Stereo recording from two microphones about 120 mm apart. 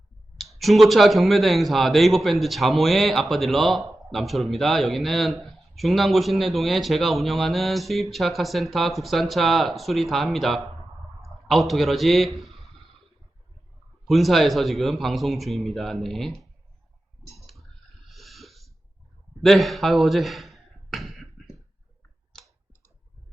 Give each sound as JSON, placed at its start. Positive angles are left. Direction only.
{"t": 0.3, "sound": "speech", "side_deg": 0}
{"t": 14.1, "sound": "speech", "side_deg": 0}
{"t": 17.3, "sound": "a sound", "side_deg": 0}